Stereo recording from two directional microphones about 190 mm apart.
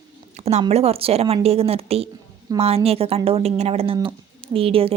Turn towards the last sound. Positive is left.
turn(degrees=-30)  # may be behind; listen again after turning